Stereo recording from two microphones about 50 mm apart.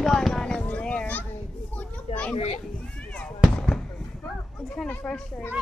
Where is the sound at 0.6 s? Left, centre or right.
Left.